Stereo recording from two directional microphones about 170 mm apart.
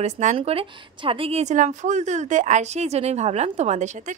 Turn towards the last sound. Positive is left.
turn(degrees=-45)  # may be behind; listen again after turning